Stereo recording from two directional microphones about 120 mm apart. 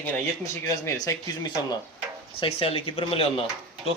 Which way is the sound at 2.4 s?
50° left (ahead or behind).